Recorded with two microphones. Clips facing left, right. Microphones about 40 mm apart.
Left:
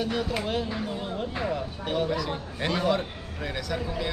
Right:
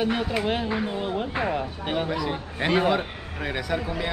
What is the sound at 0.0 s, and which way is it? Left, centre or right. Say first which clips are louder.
Speech: right 4 dB; right.